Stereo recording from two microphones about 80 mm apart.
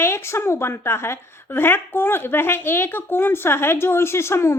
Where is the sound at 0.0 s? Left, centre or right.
Left.